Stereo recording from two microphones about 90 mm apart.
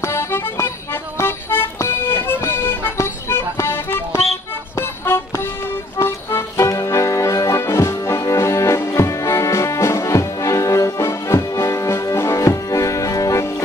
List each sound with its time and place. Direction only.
0.0 s music: 30° left (ahead or behind)
1.1 s accordion: 25° left (ahead or behind)
4.7 s music: 25° left (ahead or behind)